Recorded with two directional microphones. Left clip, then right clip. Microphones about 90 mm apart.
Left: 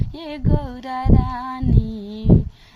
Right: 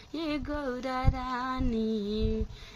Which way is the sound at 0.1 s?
30° left (ahead or behind).